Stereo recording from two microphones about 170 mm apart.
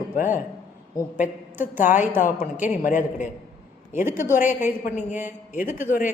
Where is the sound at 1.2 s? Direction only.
10° right (ahead or behind).